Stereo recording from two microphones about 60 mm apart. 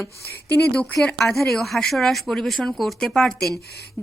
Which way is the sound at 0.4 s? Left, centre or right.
Left.